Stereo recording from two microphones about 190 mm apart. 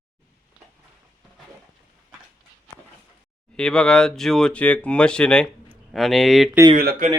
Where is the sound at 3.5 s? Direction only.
5° left (ahead or behind).